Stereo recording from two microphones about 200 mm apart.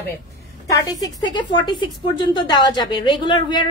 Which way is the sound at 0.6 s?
15° left (ahead or behind).